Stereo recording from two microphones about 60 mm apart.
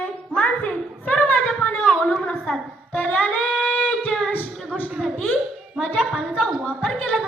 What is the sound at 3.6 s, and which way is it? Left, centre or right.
Singing, left.